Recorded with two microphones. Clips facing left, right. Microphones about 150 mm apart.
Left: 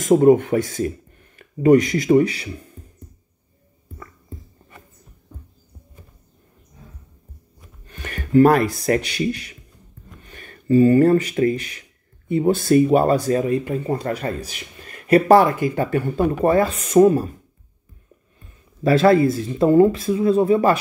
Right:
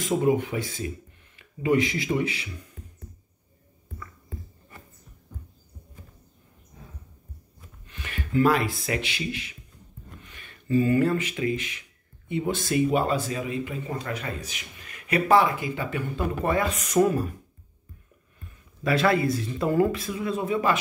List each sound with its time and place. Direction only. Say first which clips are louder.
0.0 s speech: left 10 dB; 50° left (ahead or behind)
7.8 s speech: left 4 dB; 45° left (ahead or behind)
14.8 s a sound: left 12 dB; 35° left (ahead or behind)
15.2 s speech: left 4 dB; 45° left (ahead or behind); by 17.4 s 30° left (ahead or behind)
18.8 s speech: left 8 dB; 35° left (ahead or behind)